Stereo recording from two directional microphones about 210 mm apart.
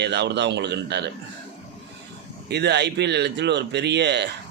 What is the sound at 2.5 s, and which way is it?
Speech, 55° right (ahead or behind).